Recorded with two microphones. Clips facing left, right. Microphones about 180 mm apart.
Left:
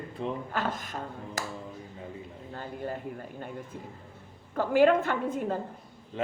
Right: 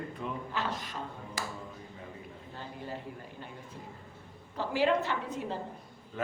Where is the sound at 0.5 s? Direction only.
50° left (ahead or behind).